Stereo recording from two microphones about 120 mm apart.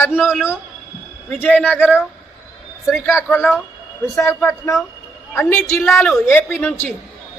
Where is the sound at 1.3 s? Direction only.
10° left (ahead or behind).